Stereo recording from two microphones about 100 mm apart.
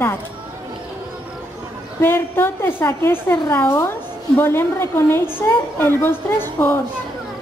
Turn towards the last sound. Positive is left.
turn(degrees=20)  # may be behind; listen again after turning